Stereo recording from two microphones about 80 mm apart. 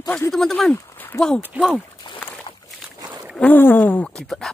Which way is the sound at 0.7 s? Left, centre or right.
Left.